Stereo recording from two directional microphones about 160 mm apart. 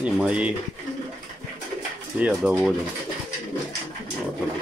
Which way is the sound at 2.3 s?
Centre (ahead or behind).